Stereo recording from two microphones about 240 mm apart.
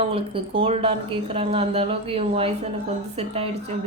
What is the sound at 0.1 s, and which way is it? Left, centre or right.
A woman's voice, right.